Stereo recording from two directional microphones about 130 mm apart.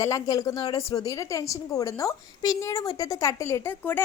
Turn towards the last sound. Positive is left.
turn(degrees=20)  # may be behind; listen again after turning